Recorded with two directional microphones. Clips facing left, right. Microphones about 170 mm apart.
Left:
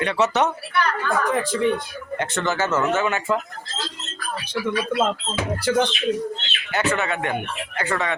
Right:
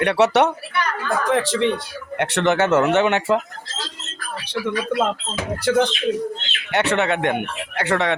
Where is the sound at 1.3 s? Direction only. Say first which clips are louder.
Right 5 dB; 80° right.